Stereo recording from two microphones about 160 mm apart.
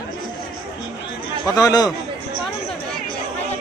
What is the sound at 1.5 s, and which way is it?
Speech, 20° left (ahead or behind).